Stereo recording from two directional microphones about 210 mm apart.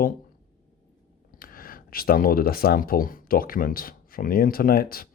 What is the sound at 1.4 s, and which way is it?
Speech, 45° left (ahead or behind).